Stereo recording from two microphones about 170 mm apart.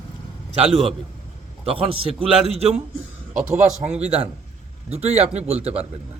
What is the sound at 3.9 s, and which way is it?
Speech, 40° right (ahead or behind).